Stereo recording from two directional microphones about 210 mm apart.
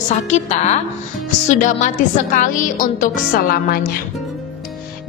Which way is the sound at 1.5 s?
35° left (ahead or behind).